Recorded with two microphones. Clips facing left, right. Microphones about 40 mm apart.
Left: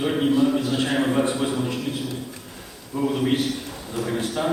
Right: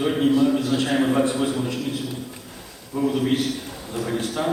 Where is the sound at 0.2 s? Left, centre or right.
Centre.